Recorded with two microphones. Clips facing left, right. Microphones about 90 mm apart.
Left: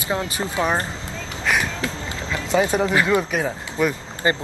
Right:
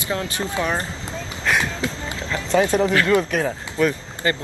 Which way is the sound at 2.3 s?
10° left (ahead or behind).